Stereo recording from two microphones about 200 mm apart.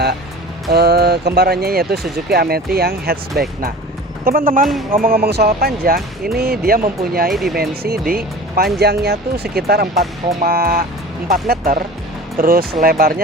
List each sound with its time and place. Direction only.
0.7 s speech: 55° right (ahead or behind)
7.3 s speech: centre (ahead or behind)
7.5 s speech: 50° right (ahead or behind)